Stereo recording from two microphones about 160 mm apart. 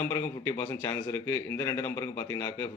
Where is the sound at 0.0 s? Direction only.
15° left (ahead or behind).